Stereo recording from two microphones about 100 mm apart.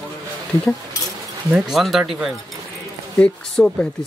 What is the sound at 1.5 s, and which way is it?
A man's voice, centre (ahead or behind).